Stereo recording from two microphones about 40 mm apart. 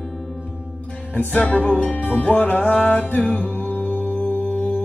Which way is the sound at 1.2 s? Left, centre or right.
Left.